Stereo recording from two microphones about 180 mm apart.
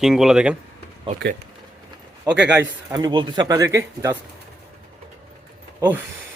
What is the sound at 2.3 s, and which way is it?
Speech, 5° right (ahead or behind).